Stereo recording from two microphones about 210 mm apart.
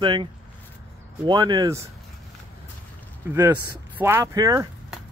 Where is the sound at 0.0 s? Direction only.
20° right (ahead or behind).